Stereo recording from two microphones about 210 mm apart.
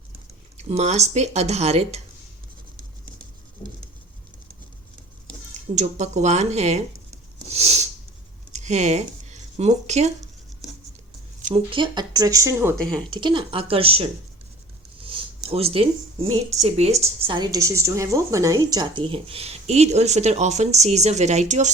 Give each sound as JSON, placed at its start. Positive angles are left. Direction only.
{"t": 0.5, "sound": "speech", "side_deg": -30}
{"t": 5.7, "sound": "speech", "side_deg": -35}
{"t": 7.5, "sound": "a sound", "side_deg": -30}
{"t": 8.5, "sound": "speech", "side_deg": -35}
{"t": 11.4, "sound": "speech", "side_deg": -25}